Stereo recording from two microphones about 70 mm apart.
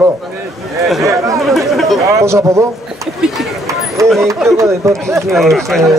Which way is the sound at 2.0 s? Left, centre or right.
Right.